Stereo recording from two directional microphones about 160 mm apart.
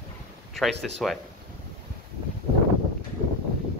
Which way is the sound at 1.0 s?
5° left (ahead or behind).